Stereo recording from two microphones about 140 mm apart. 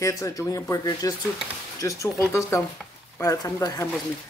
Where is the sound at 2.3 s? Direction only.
20° left (ahead or behind).